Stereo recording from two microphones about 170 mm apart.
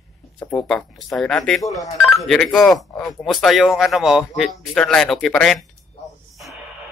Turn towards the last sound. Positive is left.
turn(degrees=0)  # may be behind; listen again after turning